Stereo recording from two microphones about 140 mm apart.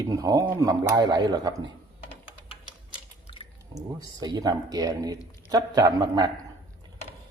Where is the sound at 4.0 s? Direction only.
30° right (ahead or behind).